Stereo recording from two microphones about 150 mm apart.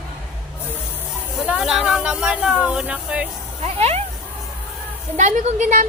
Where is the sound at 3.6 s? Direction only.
45° right (ahead or behind).